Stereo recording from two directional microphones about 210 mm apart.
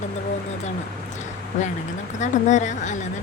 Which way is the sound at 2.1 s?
35° left (ahead or behind).